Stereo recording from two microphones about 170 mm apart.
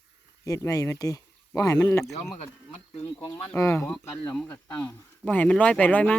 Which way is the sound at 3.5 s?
15° left (ahead or behind).